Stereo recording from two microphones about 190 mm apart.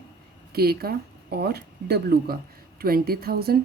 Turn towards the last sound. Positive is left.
turn(degrees=-55)  # may be behind; listen again after turning